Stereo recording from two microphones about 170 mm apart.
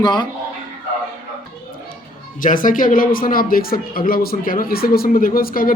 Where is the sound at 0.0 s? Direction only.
25° left (ahead or behind).